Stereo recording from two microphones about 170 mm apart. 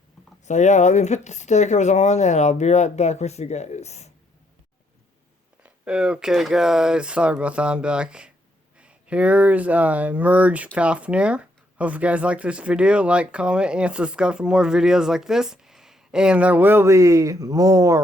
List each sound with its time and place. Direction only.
0.4 s speech: 45° left (ahead or behind)
5.6 s speech: 5° right (ahead or behind)